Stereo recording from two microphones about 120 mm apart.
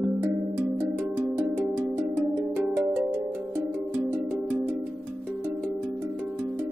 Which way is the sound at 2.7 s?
15° right (ahead or behind).